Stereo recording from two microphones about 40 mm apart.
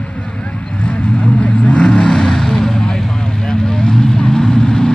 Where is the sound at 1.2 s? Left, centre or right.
Left.